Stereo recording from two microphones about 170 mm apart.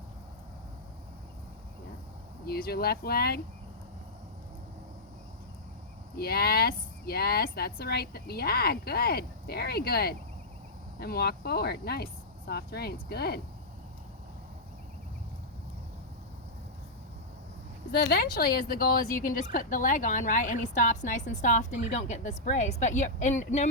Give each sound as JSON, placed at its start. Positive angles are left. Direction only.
{"t": 2.5, "sound": "speech", "side_deg": 65}
{"t": 6.1, "sound": "speech", "side_deg": 65}
{"t": 17.9, "sound": "a woman's voice", "side_deg": 65}